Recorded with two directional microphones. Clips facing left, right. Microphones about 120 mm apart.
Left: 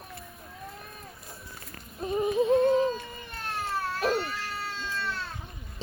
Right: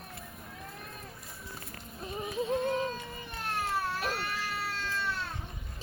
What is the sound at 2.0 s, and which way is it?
Yodeling, 30° left (ahead or behind).